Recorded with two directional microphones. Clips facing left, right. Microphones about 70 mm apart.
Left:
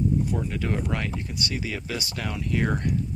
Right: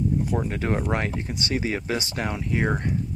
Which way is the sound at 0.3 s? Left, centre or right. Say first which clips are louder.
Right 3 dB; right.